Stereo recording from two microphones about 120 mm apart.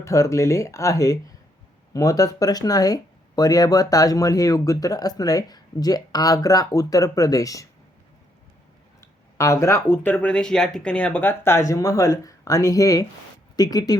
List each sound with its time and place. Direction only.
0.0 s speech: 25° left (ahead or behind)
9.0 s speech: 25° left (ahead or behind)